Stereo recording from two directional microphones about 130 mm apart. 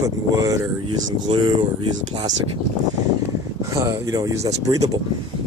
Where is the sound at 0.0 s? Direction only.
25° right (ahead or behind).